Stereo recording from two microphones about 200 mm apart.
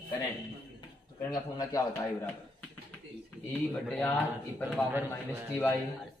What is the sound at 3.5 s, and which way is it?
Speech, centre (ahead or behind).